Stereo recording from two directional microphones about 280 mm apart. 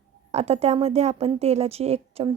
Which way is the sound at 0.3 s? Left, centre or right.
Right.